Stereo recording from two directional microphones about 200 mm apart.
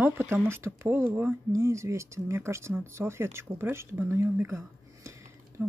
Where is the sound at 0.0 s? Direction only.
10° right (ahead or behind).